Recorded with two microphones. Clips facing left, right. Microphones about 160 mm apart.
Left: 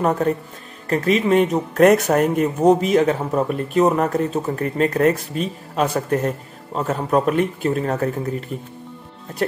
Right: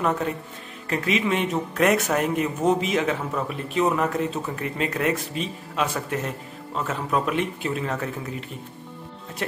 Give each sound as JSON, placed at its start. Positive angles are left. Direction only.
{"t": 0.0, "sound": "speech", "side_deg": 40}